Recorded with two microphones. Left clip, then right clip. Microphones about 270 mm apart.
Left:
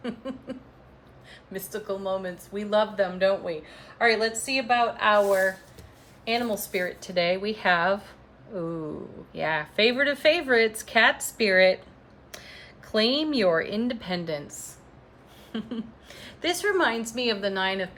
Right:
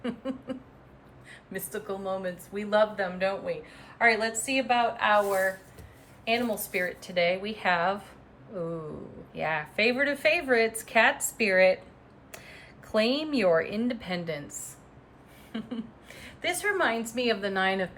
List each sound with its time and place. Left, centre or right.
0.0 s a sound: centre
1.3 s a woman's voice: centre
9.3 s a woman's voice: centre
15.5 s a woman's voice: centre